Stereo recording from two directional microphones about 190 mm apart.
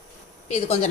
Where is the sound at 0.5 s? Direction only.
35° left (ahead or behind).